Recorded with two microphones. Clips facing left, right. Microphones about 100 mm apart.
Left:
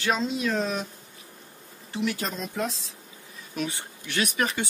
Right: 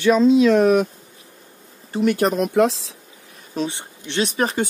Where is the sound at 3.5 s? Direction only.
25° right (ahead or behind).